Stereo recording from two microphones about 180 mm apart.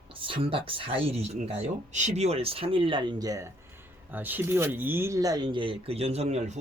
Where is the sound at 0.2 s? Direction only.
30° right (ahead or behind).